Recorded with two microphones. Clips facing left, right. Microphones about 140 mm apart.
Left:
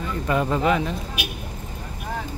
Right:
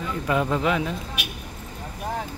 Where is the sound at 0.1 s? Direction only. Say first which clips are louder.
Left 1 dB; centre (ahead or behind).